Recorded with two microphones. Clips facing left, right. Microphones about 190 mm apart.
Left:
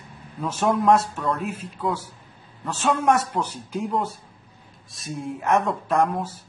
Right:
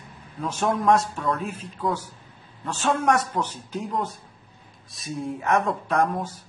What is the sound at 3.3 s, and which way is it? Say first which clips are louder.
Speech: left 1 dB; 10° left (ahead or behind).